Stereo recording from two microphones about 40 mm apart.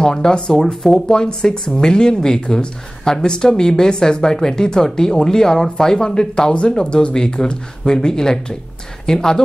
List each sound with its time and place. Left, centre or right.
0.0 s speech: centre